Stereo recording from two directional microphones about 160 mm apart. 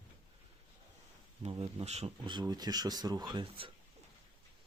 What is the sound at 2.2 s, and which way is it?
Speech, 30° right (ahead or behind).